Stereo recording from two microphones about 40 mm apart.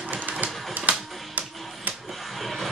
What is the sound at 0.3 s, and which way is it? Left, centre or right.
Printer, right.